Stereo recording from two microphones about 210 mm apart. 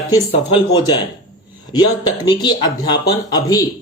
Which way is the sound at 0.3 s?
20° left (ahead or behind).